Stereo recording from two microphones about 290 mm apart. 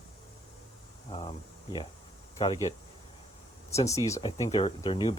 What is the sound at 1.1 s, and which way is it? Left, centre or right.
Speech, centre.